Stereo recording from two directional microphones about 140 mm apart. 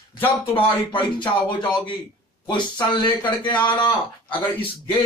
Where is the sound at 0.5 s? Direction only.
35° left (ahead or behind).